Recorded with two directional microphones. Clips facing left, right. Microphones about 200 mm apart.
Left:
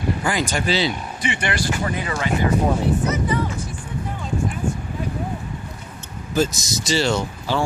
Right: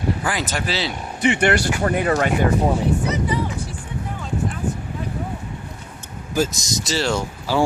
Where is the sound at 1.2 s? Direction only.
65° right (ahead or behind).